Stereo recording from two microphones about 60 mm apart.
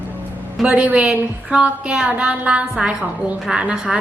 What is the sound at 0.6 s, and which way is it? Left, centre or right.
A woman's voice, centre.